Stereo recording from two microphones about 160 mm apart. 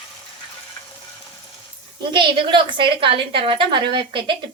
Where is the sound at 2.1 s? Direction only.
30° right (ahead or behind).